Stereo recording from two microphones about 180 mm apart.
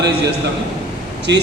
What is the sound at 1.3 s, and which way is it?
Speech, 80° right.